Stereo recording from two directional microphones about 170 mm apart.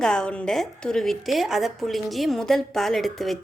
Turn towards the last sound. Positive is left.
turn(degrees=0)  # may be behind; listen again after turning